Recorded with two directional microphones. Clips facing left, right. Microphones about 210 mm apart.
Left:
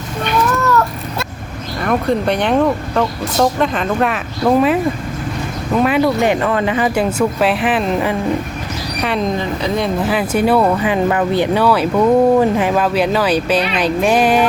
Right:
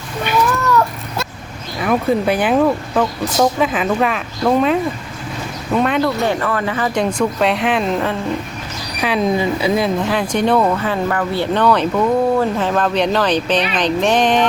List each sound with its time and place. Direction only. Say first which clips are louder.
1.8 s speech: even; 5° right (ahead or behind)
6.2 s speech: left 3 dB; 20° left (ahead or behind)
6.9 s speech: left 2 dB; 5° left (ahead or behind)
11.6 s speech: right 1 dB; 5° left (ahead or behind)